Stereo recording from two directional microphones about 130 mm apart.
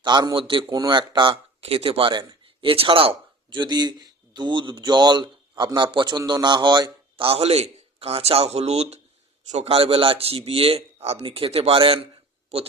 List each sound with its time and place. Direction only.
0.0 s a man's voice: 35° right (ahead or behind)
7.3 s a man's voice: 50° right (ahead or behind)
9.7 s a man's voice: 45° right (ahead or behind)